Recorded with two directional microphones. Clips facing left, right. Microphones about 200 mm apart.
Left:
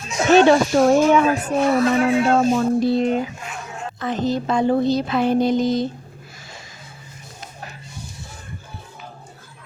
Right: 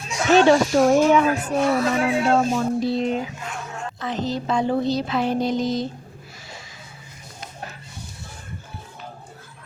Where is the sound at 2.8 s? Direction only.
55° left (ahead or behind).